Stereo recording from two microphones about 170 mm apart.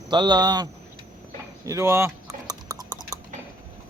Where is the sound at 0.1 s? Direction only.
25° right (ahead or behind).